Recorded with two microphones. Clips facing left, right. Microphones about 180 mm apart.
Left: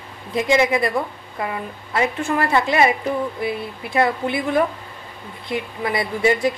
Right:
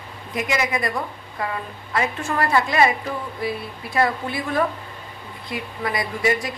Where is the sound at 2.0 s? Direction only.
25° left (ahead or behind).